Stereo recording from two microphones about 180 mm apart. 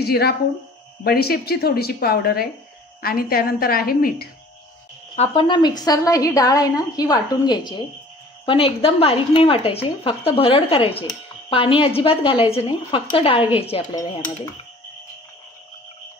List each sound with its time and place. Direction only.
0.0 s a woman's voice: 60° left (ahead or behind)
5.1 s a woman's voice: 35° left (ahead or behind)